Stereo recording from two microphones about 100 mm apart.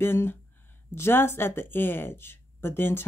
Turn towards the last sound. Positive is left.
turn(degrees=25)  # may be behind; listen again after turning